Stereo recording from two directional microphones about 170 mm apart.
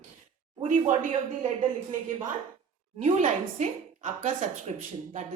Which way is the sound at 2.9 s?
40° right (ahead or behind).